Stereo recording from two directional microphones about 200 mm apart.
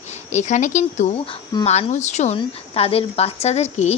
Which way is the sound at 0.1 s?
35° left (ahead or behind).